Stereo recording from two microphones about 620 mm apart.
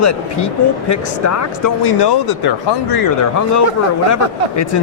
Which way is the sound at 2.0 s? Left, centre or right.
Left.